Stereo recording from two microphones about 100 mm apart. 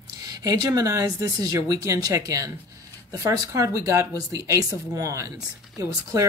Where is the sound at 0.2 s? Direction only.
40° right (ahead or behind).